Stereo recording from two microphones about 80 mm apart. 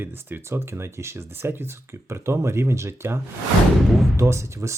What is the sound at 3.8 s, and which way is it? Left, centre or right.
Speech, centre.